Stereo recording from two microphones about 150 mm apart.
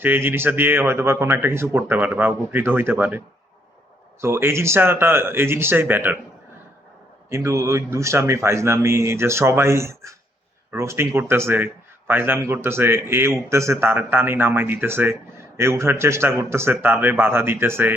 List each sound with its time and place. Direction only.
0.0 s speech: 15° right (ahead or behind)
4.2 s speech: 15° right (ahead or behind)
7.3 s speech: 20° right (ahead or behind)